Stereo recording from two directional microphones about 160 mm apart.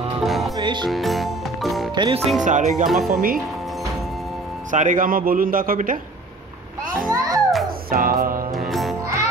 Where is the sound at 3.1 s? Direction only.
60° right (ahead or behind).